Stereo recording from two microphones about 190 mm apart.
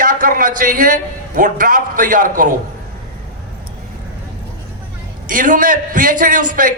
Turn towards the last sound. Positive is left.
turn(degrees=-45)  # may be behind; listen again after turning